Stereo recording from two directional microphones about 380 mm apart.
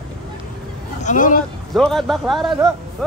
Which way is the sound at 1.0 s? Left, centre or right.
Left.